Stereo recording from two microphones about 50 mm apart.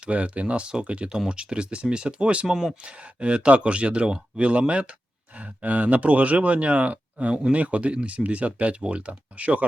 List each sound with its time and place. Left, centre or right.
0.0 s speech: right